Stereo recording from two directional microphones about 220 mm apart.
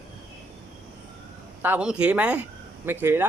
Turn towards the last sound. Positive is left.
turn(degrees=-10)  # may be behind; listen again after turning